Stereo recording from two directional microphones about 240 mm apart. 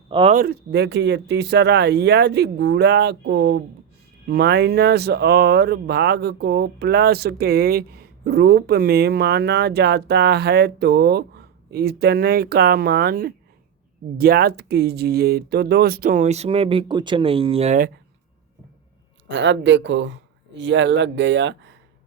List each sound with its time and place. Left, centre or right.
0.1 s speech: right
0.3 s speech: right
19.3 s speech: right